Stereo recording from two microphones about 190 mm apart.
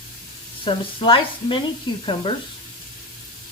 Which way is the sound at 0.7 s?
25° left (ahead or behind).